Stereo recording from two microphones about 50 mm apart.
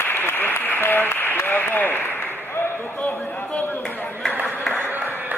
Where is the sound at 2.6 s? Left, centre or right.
Left.